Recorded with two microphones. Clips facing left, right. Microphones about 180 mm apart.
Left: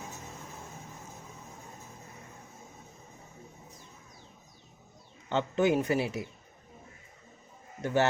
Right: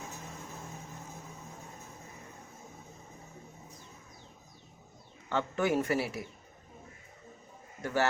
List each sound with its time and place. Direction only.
5.3 s a man's voice: 20° left (ahead or behind)
7.8 s speech: 20° left (ahead or behind)